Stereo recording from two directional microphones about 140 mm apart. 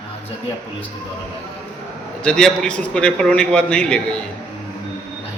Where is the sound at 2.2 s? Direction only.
5° left (ahead or behind).